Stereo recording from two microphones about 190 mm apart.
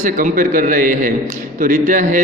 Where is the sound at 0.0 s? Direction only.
45° right (ahead or behind).